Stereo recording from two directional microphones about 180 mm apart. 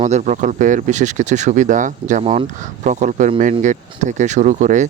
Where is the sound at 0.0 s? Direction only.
40° right (ahead or behind).